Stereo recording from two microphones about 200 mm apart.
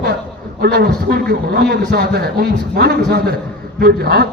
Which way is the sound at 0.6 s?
50° right (ahead or behind).